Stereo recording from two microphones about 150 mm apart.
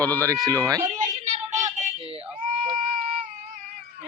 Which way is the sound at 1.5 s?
55° right (ahead or behind).